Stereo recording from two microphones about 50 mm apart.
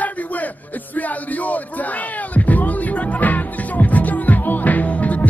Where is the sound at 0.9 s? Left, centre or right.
Left.